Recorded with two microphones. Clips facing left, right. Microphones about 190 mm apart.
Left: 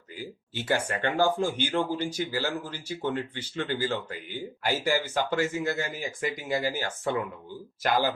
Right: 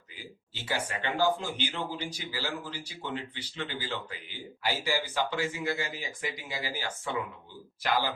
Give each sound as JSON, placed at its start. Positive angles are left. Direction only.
{"t": 0.2, "sound": "speech", "side_deg": 50}